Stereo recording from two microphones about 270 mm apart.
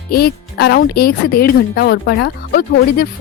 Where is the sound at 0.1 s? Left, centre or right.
Left.